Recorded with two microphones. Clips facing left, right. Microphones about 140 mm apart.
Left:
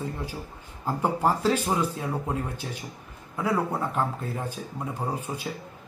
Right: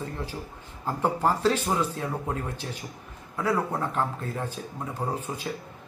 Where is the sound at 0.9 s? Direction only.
10° left (ahead or behind).